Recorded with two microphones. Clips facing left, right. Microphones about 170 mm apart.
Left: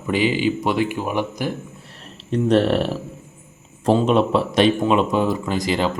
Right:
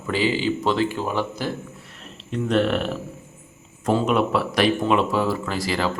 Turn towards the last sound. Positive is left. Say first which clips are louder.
# left 3 dB
turn(degrees=20)  # may be behind; listen again after turning